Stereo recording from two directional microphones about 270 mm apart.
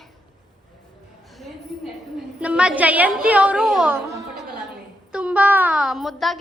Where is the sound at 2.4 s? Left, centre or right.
Centre.